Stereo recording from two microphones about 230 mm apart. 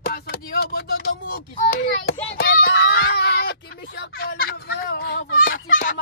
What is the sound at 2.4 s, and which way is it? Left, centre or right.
Screaming, left.